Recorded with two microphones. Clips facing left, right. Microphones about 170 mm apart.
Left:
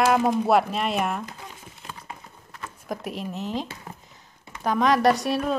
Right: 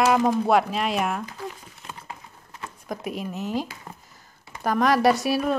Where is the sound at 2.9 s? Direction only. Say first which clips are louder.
Right 1 dB; centre (ahead or behind).